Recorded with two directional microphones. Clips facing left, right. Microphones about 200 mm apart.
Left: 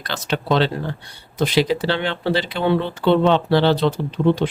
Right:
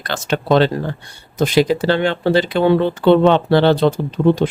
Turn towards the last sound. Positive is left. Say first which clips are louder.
# right 3 dB
turn(degrees=-45)  # may be behind; listen again after turning